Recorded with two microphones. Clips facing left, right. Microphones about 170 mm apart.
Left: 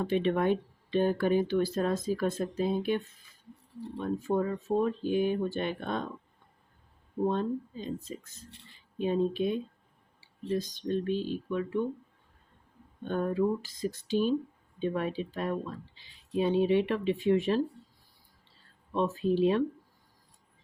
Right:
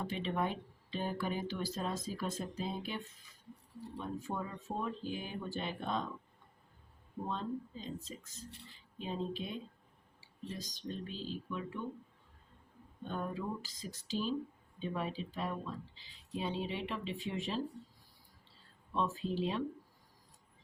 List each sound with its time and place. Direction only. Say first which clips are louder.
0.0 s speech: left 9 dB; 65° left (ahead or behind)
7.3 s speech: left 9 dB; 60° left (ahead or behind)
10.8 s speech: left 10 dB; 65° left (ahead or behind)
13.1 s speech: left 11 dB; 60° left (ahead or behind)
18.9 s speech: left 8 dB; 60° left (ahead or behind)